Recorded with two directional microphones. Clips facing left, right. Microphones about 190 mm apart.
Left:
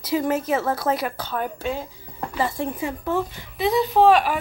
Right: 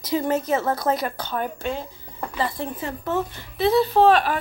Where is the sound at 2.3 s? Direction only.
10° left (ahead or behind).